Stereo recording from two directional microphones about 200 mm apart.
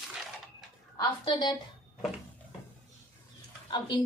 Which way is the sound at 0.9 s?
20° left (ahead or behind).